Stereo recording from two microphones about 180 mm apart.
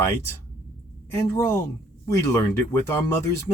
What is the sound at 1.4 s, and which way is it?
Speech, 15° left (ahead or behind).